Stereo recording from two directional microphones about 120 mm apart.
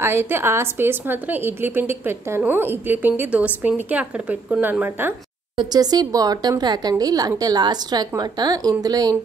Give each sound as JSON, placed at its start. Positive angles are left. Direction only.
{"t": 0.0, "sound": "a woman's voice", "side_deg": -20}
{"t": 5.6, "sound": "speech", "side_deg": -35}